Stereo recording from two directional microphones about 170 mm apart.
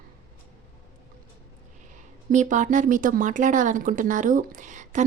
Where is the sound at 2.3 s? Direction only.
45° right (ahead or behind).